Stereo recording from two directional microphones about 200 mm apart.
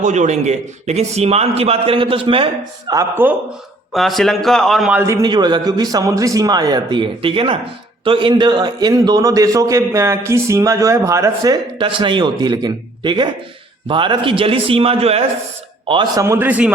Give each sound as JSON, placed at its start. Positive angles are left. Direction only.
{"t": 0.0, "sound": "a man's voice", "side_deg": -35}
{"t": 3.9, "sound": "a man's voice", "side_deg": 0}
{"t": 16.2, "sound": "a man's voice", "side_deg": -10}